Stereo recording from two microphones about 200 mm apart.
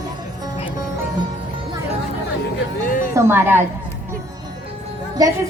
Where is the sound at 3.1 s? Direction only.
10° right (ahead or behind).